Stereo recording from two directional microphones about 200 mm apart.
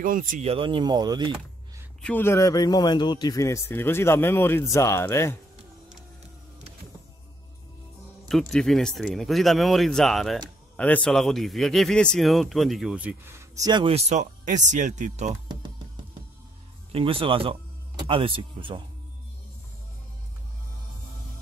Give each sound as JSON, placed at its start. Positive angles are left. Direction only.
{"t": 0.0, "sound": "speech", "side_deg": -40}
{"t": 2.0, "sound": "a man's voice", "side_deg": 5}
{"t": 8.3, "sound": "a man's voice", "side_deg": 0}
{"t": 16.9, "sound": "speech", "side_deg": -25}